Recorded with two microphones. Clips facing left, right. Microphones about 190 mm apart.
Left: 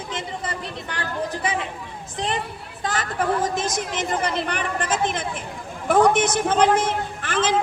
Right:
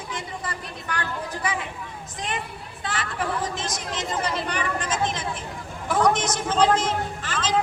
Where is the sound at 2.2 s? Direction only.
35° left (ahead or behind); by 7.5 s 55° left (ahead or behind).